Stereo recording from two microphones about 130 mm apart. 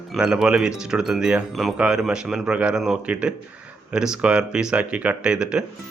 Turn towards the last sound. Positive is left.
turn(degrees=-5)  # may be behind; listen again after turning